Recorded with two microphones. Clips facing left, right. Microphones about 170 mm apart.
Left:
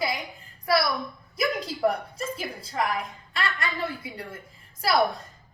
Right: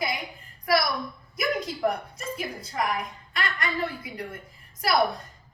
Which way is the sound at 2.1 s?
30° left (ahead or behind).